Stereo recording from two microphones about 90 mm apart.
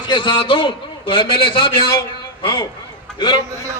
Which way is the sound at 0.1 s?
60° left (ahead or behind).